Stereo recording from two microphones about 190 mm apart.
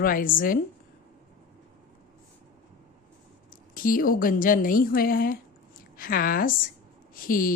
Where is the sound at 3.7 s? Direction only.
45° left (ahead or behind).